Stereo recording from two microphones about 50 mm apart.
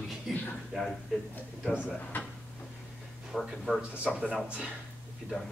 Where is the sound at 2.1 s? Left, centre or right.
Left.